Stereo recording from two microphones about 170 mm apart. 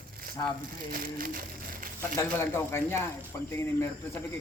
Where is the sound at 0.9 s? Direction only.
55° right (ahead or behind).